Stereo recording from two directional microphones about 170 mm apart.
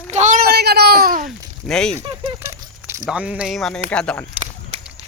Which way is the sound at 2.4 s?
15° right (ahead or behind).